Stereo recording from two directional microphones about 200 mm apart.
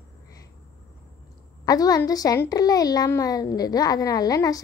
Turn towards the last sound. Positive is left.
turn(degrees=20)  # may be behind; listen again after turning